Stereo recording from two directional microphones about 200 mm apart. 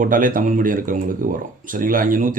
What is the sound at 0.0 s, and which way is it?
Speech, 40° right (ahead or behind).